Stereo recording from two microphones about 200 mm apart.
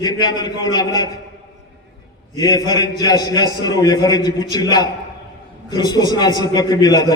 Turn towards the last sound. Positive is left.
turn(degrees=20)  # may be behind; listen again after turning